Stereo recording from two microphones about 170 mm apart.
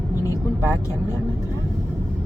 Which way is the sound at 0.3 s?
15° left (ahead or behind).